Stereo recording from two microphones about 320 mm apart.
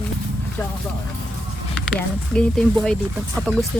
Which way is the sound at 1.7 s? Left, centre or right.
Centre.